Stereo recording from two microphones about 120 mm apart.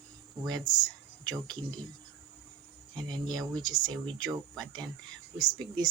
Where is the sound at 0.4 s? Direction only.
35° right (ahead or behind).